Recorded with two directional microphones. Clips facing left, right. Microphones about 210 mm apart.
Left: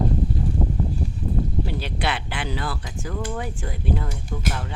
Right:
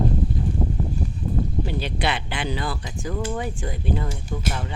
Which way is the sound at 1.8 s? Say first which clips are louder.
Right 1 dB; 5° left (ahead or behind).